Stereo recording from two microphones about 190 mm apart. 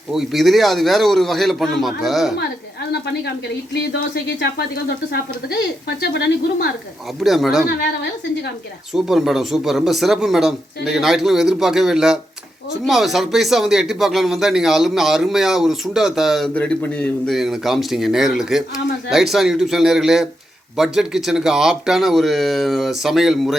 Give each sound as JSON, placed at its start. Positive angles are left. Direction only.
{"t": 0.1, "sound": "speech", "side_deg": 0}
{"t": 2.9, "sound": "a woman's voice", "side_deg": 60}
{"t": 6.0, "sound": "a woman's voice", "side_deg": 60}
{"t": 7.2, "sound": "speech", "side_deg": 0}
{"t": 8.9, "sound": "speech", "side_deg": 0}